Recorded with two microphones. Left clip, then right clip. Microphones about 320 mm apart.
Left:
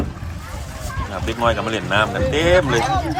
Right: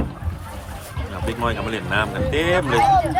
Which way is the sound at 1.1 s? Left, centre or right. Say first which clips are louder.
Left 5 dB; centre.